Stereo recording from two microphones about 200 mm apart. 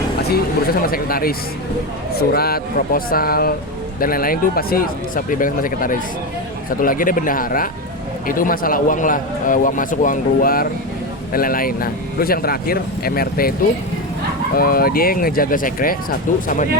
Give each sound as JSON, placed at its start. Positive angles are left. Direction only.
{"t": 0.3, "sound": "speech", "side_deg": 50}
{"t": 14.5, "sound": "speech", "side_deg": 45}